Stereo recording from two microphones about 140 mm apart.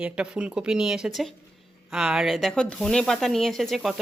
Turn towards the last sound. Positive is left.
turn(degrees=0)  # may be behind; listen again after turning